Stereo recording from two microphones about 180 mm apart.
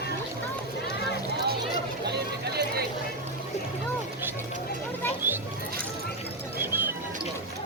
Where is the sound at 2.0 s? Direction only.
65° right (ahead or behind).